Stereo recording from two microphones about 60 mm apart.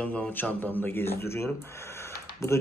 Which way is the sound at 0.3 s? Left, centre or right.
Left.